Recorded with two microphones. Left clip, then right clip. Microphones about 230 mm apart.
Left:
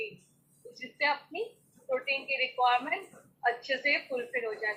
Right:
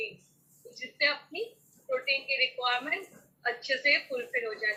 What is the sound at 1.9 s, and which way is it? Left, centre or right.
A woman's voice, centre.